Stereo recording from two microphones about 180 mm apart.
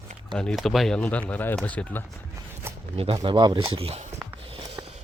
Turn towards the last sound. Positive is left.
turn(degrees=-30)  # may be behind; listen again after turning